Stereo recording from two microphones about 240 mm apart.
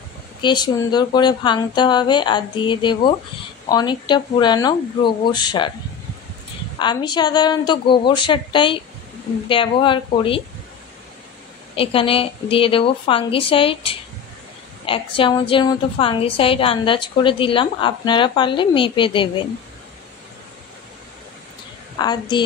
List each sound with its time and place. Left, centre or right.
0.4 s a woman's voice: centre
6.8 s a woman's voice: centre
11.7 s a woman's voice: left
21.9 s speech: centre